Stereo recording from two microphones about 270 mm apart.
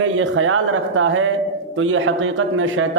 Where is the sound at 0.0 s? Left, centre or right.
Right.